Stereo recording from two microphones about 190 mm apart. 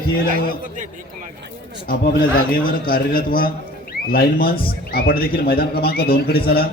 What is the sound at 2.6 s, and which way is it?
A man's voice, 50° left (ahead or behind).